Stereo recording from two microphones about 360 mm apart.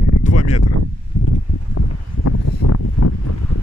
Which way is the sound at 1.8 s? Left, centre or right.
Left.